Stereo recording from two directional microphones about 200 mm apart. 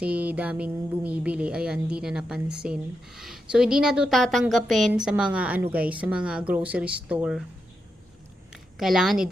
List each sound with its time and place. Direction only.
0.0 s a woman's voice: 5° right (ahead or behind)
8.8 s speech: centre (ahead or behind)